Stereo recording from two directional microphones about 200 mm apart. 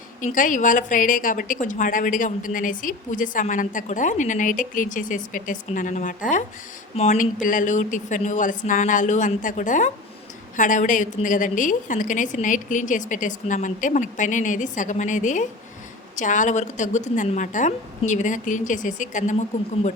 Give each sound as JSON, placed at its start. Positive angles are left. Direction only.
{"t": 0.2, "sound": "a woman's voice", "side_deg": 40}